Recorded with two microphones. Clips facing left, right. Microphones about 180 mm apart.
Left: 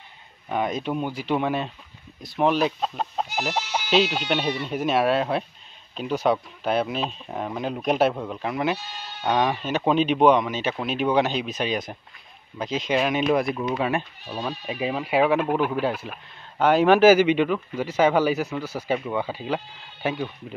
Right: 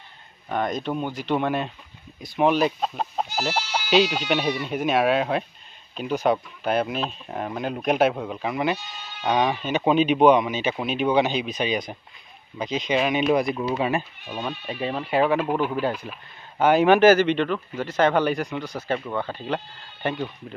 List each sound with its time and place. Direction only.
0.5 s speech: 5° left (ahead or behind)
3.5 s speech: 20° left (ahead or behind)
3.9 s speech: centre (ahead or behind)